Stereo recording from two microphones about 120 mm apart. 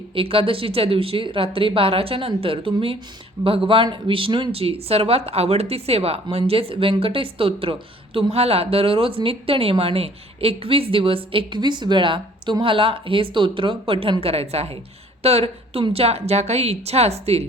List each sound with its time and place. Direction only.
0.1 s speech: 50° right (ahead or behind)